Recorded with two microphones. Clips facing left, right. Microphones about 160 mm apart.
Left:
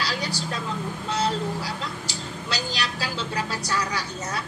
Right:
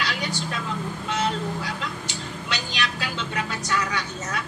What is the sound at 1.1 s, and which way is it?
Speech, 35° left (ahead or behind).